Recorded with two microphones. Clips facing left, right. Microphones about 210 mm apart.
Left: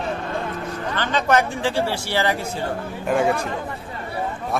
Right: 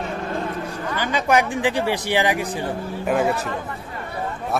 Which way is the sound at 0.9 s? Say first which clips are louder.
Even; 10° right (ahead or behind).